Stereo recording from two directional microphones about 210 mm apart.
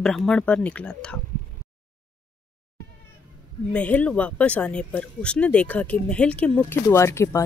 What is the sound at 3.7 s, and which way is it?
A woman's voice, 5° left (ahead or behind).